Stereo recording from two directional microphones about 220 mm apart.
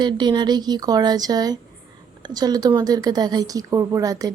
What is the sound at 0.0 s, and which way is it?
A woman's voice, 20° right (ahead or behind).